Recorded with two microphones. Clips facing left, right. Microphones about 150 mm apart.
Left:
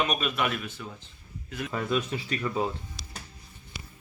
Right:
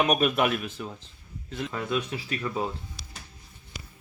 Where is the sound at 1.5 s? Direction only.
25° right (ahead or behind).